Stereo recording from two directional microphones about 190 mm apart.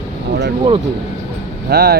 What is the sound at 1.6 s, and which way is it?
Speech, 55° right (ahead or behind).